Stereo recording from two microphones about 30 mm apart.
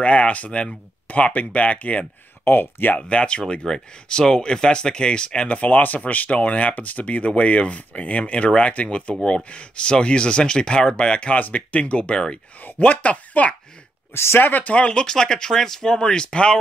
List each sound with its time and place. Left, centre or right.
0.0 s speech: left
1.0 s speech: left
3.0 s speech: left
3.6 s speech: left
5.7 s speech: left
6.3 s speech: left
11.3 s speech: left
11.7 s speech: left
12.7 s speech: left
14.7 s speech: left
15.1 s speech: left